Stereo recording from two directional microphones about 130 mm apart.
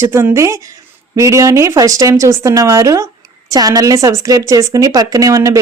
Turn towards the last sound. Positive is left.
turn(degrees=-25)  # may be behind; listen again after turning